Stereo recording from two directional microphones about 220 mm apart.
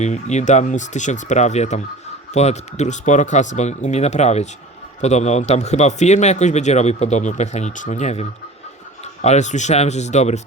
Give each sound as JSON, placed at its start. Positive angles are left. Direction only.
{"t": 0.0, "sound": "a man's voice", "side_deg": 30}